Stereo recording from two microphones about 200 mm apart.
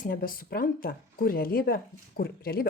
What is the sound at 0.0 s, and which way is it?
Speech, 45° left (ahead or behind).